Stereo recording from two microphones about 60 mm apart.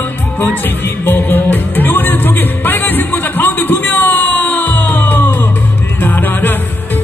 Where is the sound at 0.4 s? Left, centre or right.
Left.